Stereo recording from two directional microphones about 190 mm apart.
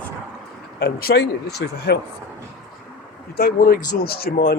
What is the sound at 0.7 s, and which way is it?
Speech, 60° left (ahead or behind).